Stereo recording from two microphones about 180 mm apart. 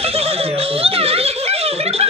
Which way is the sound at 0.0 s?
35° right (ahead or behind).